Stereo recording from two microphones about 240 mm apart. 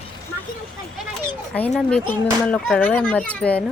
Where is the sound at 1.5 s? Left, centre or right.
Centre.